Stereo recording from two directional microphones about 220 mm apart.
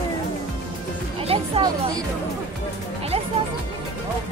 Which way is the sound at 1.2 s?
20° right (ahead or behind).